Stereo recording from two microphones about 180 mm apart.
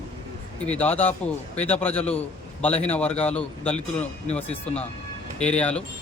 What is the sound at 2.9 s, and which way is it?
A man's voice, 5° left (ahead or behind).